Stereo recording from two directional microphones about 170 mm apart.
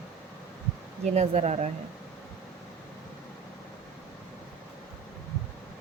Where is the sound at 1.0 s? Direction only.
40° right (ahead or behind).